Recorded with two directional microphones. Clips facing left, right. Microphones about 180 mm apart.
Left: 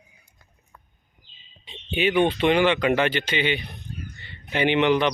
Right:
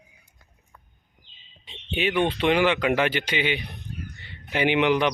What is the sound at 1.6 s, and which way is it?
A man's voice, centre (ahead or behind).